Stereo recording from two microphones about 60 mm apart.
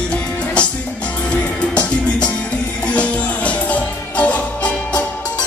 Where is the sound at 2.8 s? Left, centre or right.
Left.